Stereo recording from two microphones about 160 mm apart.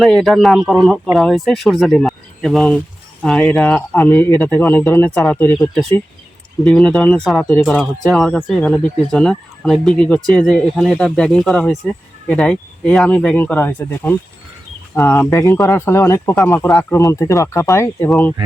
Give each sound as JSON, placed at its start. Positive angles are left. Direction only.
{"t": 0.0, "sound": "speech", "side_deg": 0}